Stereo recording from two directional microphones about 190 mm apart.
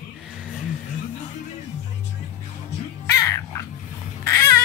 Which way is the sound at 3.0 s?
15° left (ahead or behind).